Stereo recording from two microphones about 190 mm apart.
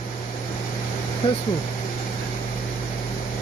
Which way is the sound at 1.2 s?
25° left (ahead or behind).